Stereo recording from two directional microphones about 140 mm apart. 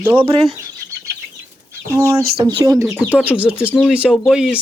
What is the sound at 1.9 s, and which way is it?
Speech, 20° right (ahead or behind).